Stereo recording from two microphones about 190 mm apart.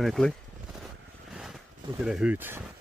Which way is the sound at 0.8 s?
5° right (ahead or behind).